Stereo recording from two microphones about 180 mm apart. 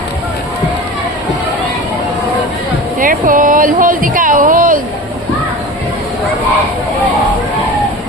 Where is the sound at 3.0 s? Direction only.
50° right (ahead or behind).